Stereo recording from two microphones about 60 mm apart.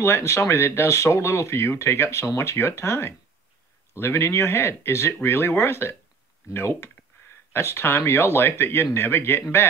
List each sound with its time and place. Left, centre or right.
0.0 s speech: left